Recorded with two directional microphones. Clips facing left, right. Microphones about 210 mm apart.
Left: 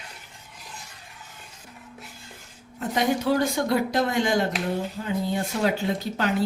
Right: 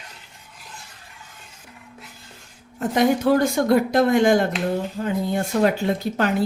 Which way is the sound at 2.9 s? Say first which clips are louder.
Right 5 dB; 50° right (ahead or behind).